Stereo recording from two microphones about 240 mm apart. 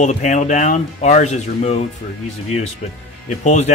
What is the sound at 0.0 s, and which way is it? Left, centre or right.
Speech, left.